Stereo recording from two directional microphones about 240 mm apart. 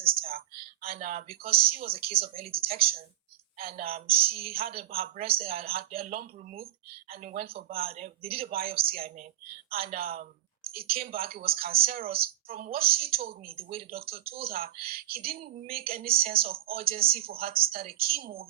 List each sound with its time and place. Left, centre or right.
0.3 s speech: right
8.2 s speech: right
8.4 s speech: right
13.5 s speech: right
14.3 s speech: right